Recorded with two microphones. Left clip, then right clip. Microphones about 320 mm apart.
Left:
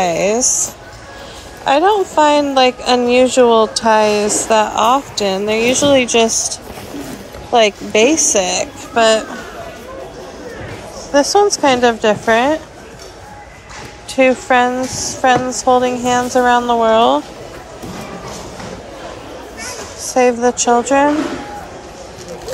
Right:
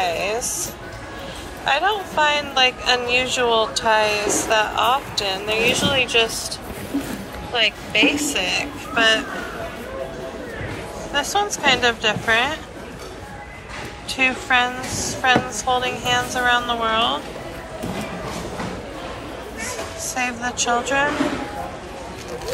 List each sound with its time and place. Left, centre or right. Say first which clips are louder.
0.0 s a sound: left 8 dB; left
1.6 s a woman's voice: left 8 dB; left
7.5 s a woman's voice: left 7 dB; centre
11.4 s a woman's voice: left 6 dB; centre
14.1 s a woman's voice: left 7 dB; centre
20.0 s a woman's voice: left 13 dB; centre